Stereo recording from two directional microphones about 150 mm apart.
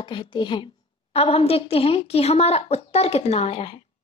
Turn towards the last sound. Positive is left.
turn(degrees=40)  # may be behind; listen again after turning